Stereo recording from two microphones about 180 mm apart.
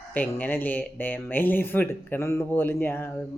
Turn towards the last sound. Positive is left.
turn(degrees=10)  # may be behind; listen again after turning